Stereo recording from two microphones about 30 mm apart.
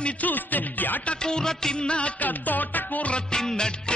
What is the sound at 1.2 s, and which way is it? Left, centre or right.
Music, left.